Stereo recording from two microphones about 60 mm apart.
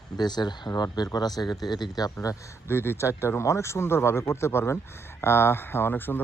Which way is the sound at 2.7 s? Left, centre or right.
Left.